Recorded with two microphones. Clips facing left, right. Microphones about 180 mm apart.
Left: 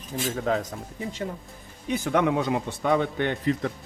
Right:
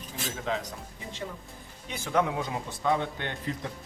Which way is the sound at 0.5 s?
45° left (ahead or behind).